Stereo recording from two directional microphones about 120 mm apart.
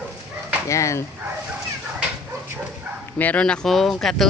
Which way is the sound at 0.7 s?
25° left (ahead or behind).